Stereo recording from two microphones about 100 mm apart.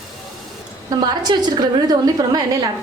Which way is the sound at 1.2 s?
45° right (ahead or behind).